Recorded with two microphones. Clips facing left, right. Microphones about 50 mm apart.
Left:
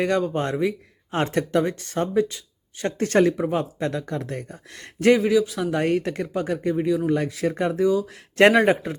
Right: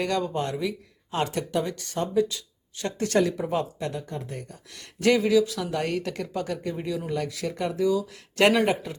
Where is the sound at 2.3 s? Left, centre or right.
Left.